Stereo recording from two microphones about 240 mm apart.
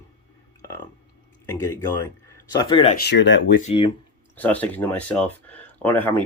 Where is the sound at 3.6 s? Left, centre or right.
Left.